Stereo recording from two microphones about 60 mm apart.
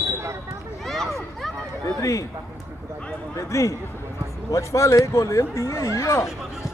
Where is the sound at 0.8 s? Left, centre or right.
Centre.